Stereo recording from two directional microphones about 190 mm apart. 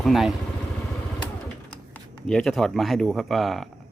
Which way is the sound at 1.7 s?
5° left (ahead or behind).